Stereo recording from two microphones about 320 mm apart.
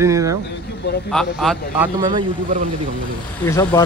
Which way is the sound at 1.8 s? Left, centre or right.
Centre.